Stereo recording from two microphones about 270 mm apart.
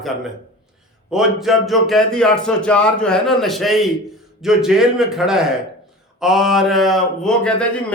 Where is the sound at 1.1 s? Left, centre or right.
Centre.